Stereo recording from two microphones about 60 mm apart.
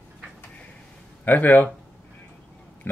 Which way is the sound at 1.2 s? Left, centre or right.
Left.